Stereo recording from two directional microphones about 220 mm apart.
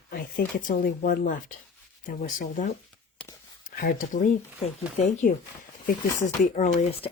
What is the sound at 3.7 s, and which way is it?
Speech, 40° left (ahead or behind).